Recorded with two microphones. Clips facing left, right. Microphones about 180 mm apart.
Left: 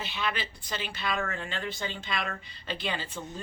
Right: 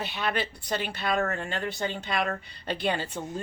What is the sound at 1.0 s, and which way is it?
Speech, 40° right (ahead or behind).